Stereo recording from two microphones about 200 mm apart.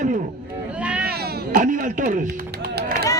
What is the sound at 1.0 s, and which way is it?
Cat, 50° right (ahead or behind).